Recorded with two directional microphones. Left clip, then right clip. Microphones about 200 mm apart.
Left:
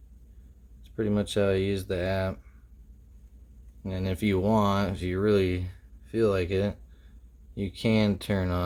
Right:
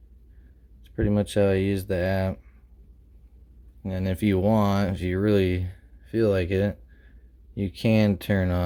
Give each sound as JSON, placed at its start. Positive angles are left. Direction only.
{"t": 0.9, "sound": "speech", "side_deg": -35}
{"t": 3.8, "sound": "speech", "side_deg": -35}